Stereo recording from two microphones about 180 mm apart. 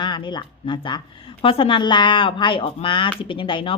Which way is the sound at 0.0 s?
25° left (ahead or behind).